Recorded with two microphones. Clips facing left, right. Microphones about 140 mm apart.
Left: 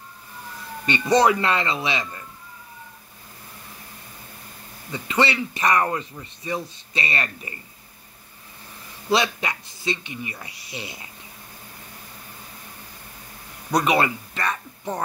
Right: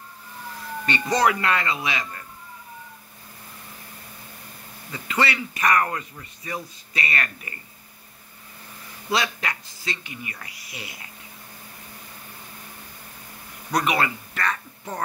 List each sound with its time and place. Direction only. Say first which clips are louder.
0.8 s speech: left 4 dB; 20° left (ahead or behind)
4.9 s speech: left 3 dB; 20° left (ahead or behind)
9.1 s speech: left 4 dB; 20° left (ahead or behind)
13.7 s speech: left 3 dB; 20° left (ahead or behind)